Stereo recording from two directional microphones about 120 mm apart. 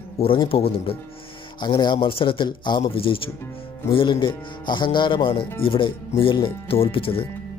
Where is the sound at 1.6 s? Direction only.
40° left (ahead or behind).